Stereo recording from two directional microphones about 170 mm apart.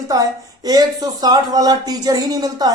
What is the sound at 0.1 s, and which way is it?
Speech, 20° right (ahead or behind).